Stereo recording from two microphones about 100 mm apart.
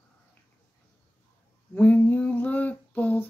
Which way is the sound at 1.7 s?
15° left (ahead or behind).